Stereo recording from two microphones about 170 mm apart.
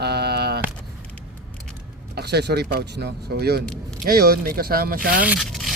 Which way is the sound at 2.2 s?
75° right (ahead or behind).